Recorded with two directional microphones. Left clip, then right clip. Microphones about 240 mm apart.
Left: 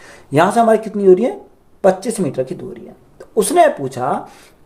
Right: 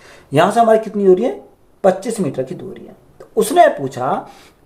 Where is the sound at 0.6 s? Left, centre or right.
Centre.